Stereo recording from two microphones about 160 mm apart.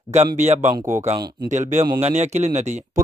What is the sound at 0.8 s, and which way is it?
Speech, 15° right (ahead or behind).